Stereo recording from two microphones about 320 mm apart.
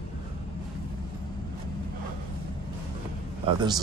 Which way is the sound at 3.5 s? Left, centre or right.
Centre.